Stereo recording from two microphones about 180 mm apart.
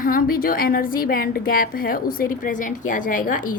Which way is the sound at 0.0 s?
50° left (ahead or behind).